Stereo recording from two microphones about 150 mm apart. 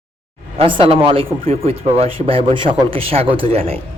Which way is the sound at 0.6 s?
35° right (ahead or behind).